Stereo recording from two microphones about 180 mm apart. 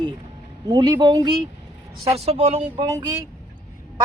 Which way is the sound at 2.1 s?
35° right (ahead or behind).